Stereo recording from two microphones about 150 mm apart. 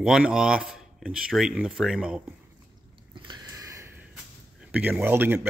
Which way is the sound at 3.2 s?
25° right (ahead or behind).